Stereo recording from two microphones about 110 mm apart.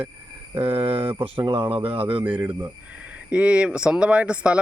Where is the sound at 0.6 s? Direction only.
55° right (ahead or behind).